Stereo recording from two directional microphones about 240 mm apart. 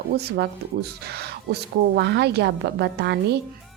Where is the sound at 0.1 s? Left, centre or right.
Right.